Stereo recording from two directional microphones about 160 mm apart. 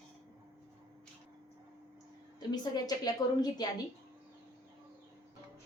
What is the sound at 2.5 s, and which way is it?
A woman's voice, 25° left (ahead or behind).